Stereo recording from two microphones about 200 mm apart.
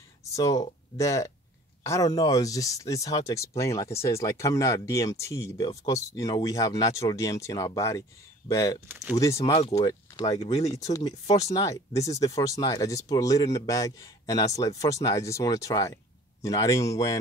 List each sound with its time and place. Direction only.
0.2 s speech: 15° left (ahead or behind)
8.8 s speech: 10° right (ahead or behind)
9.1 s speech: 15° left (ahead or behind)
9.4 s speech: 30° left (ahead or behind)